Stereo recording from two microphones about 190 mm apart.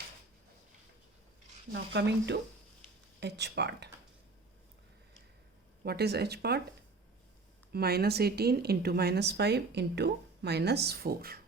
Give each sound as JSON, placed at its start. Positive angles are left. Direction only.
{"t": 1.7, "sound": "speech", "side_deg": -65}
{"t": 5.8, "sound": "speech", "side_deg": -55}
{"t": 7.7, "sound": "speech", "side_deg": -55}